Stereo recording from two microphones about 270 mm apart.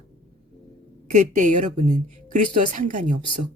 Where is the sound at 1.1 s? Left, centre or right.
Right.